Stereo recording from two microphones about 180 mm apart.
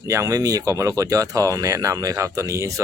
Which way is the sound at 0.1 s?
15° right (ahead or behind).